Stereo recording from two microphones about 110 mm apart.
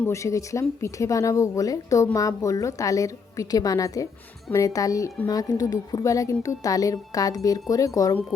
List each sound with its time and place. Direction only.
0.1 s a woman's voice: 30° left (ahead or behind)